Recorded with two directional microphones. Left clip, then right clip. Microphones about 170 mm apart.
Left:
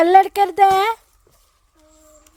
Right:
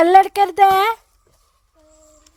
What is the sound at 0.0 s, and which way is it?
A child's voice, 15° right (ahead or behind).